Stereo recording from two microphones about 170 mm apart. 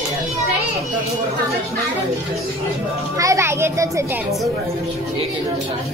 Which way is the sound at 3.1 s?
20° right (ahead or behind).